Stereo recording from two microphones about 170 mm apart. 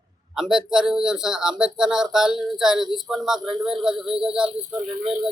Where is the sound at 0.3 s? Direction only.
Centre (ahead or behind).